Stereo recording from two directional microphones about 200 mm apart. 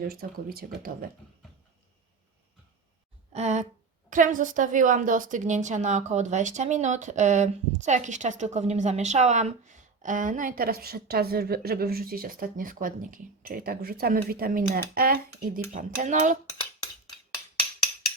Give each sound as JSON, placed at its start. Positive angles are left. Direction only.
{"t": 0.1, "sound": "speech", "side_deg": -50}
{"t": 3.3, "sound": "a woman's voice", "side_deg": -35}